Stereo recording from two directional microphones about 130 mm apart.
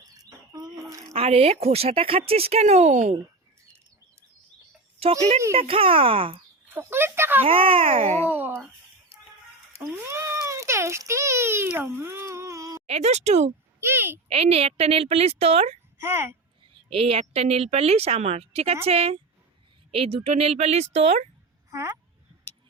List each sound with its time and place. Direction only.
0.2 s a sound: 30° right (ahead or behind)
1.1 s a woman's voice: 50° right (ahead or behind)
5.5 s a woman's voice: 45° right (ahead or behind)
6.7 s speech: 20° right (ahead or behind)
7.4 s a woman's voice: 45° right (ahead or behind)
8.0 s speech: 60° right (ahead or behind)
8.3 s speech: 15° right (ahead or behind)
9.9 s a sound: 20° right (ahead or behind)
12.9 s speech: 55° right (ahead or behind)
13.8 s speech: 15° right (ahead or behind)
14.3 s a woman's voice: 50° right (ahead or behind)
16.0 s speech: 20° right (ahead or behind)
16.9 s a woman's voice: 50° right (ahead or behind)
21.7 s a child's voice: 25° right (ahead or behind)